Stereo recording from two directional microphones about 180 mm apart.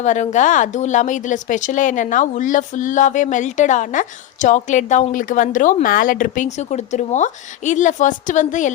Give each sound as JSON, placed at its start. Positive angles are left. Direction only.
{"t": 0.0, "sound": "speech", "side_deg": 40}